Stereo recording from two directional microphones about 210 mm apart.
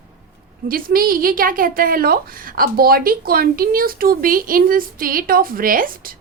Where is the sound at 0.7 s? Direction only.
45° right (ahead or behind).